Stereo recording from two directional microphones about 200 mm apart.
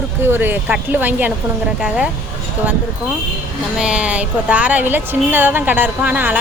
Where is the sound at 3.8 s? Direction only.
5° right (ahead or behind).